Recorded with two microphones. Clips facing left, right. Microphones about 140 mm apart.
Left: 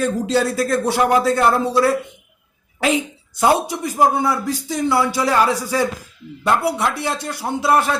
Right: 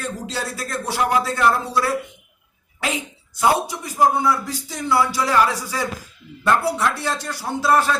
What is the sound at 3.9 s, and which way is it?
Speech, 25° left (ahead or behind).